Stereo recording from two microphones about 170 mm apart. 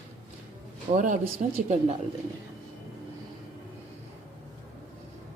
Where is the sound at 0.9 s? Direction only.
50° right (ahead or behind).